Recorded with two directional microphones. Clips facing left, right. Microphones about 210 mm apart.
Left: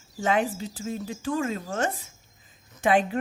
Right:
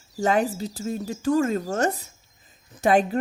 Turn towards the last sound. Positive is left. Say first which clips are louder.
# right 3 dB
turn(degrees=-40)  # may be behind; listen again after turning